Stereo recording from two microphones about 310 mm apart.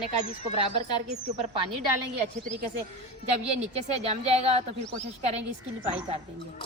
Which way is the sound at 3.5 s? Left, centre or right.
Centre.